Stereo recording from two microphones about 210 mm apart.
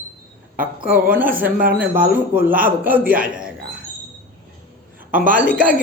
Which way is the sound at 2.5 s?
45° right (ahead or behind).